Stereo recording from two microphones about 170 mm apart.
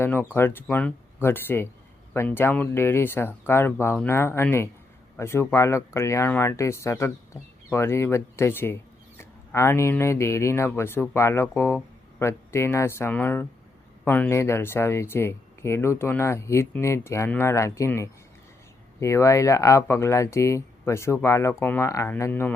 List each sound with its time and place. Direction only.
0.0 s speech: 15° left (ahead or behind)